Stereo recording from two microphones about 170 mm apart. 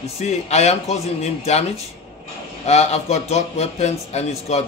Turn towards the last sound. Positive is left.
turn(degrees=40)  # may be behind; listen again after turning